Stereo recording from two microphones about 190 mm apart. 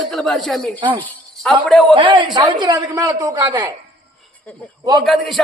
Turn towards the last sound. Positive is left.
turn(degrees=0)  # may be behind; listen again after turning